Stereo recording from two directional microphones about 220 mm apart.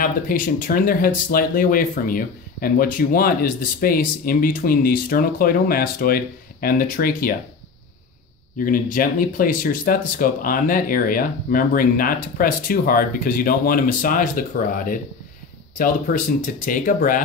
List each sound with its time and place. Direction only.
0.0 s speech: 40° left (ahead or behind)
8.5 s speech: 40° left (ahead or behind)
15.8 s speech: 40° left (ahead or behind)